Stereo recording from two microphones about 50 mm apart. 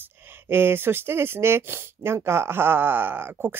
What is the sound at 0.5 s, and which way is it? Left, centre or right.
Speech, right.